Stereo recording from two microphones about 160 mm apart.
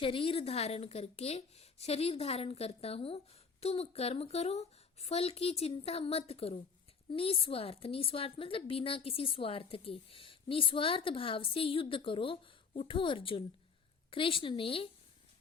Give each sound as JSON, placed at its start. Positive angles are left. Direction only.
{"t": 0.0, "sound": "a woman's voice", "side_deg": 35}